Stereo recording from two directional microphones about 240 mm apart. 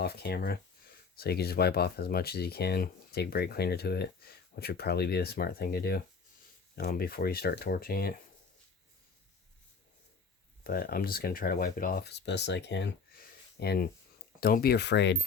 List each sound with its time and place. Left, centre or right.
0.0 s speech: left
10.6 s speech: left